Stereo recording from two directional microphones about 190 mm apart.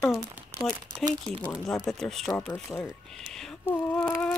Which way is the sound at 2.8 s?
Centre (ahead or behind).